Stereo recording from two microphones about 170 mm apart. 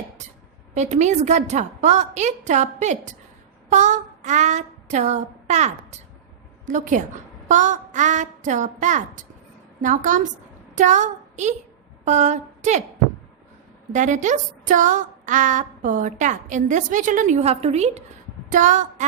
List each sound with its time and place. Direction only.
0.7 s a woman's voice: 45° right (ahead or behind)
3.7 s child singing: 45° right (ahead or behind)
6.7 s a woman's voice: 50° right (ahead or behind)
13.9 s a woman's voice: 45° right (ahead or behind)